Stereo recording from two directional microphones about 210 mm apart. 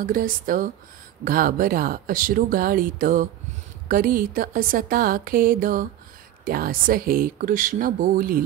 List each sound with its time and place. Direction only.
0.0 s speech: 40° right (ahead or behind)